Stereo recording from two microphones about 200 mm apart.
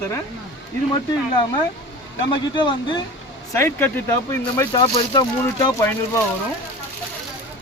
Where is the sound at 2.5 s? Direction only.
25° left (ahead or behind).